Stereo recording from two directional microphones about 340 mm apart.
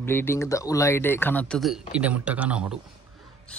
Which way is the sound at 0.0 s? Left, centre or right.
Centre.